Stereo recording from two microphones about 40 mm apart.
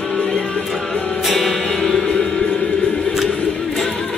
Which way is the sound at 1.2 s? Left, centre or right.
Centre.